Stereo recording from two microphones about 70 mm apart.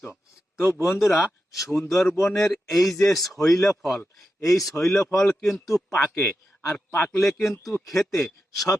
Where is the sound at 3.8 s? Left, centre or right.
Centre.